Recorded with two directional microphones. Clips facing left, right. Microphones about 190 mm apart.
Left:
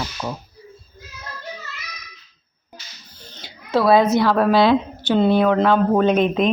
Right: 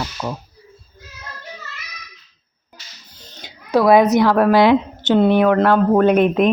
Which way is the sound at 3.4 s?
15° right (ahead or behind).